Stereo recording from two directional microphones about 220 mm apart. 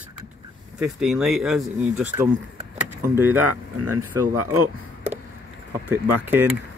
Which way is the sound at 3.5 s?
90° right.